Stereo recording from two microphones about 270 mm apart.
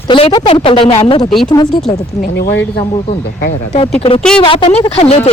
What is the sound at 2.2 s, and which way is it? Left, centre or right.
Speech, left.